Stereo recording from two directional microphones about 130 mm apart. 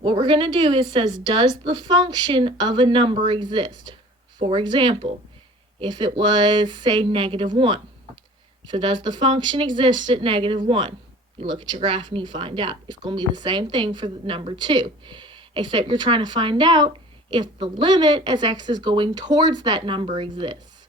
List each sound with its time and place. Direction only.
0.0 s speech: 40° right (ahead or behind)